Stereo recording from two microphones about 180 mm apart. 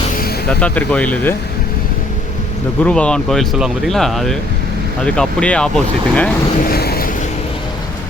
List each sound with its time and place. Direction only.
0.4 s speech: 5° left (ahead or behind)
2.8 s speech: 5° left (ahead or behind)
6.6 s vehicle: 60° left (ahead or behind)